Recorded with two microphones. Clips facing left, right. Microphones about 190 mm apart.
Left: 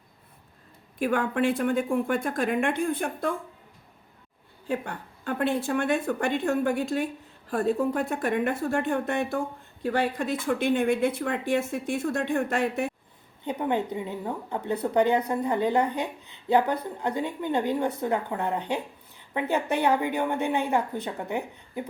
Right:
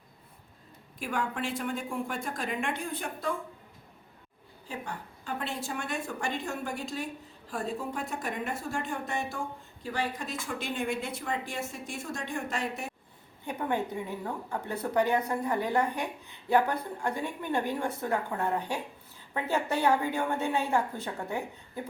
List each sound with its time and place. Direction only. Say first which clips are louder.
0.9 s speech: left 8 dB; 55° left (ahead or behind)
4.7 s speech: left 8 dB; 60° left (ahead or behind)
13.4 s a woman's voice: left 4 dB; 20° left (ahead or behind)